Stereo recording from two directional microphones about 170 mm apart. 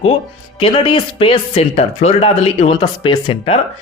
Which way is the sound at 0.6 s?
30° left (ahead or behind).